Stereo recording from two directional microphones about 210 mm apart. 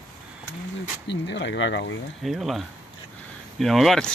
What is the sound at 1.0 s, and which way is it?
Speech, 55° left (ahead or behind).